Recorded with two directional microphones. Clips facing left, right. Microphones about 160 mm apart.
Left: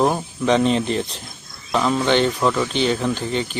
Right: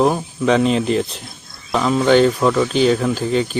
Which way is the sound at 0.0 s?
Centre (ahead or behind).